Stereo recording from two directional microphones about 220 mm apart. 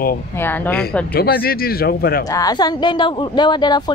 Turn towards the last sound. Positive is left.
turn(degrees=20)  # may be behind; listen again after turning